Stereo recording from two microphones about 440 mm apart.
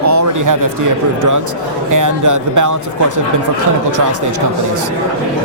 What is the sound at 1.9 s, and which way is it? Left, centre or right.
Speech, right.